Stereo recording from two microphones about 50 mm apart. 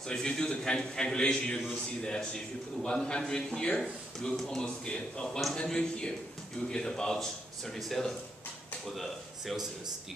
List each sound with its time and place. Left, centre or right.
0.1 s a man's voice: centre